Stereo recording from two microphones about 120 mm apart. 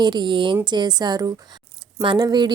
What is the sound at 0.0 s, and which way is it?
A woman's voice, 40° right (ahead or behind).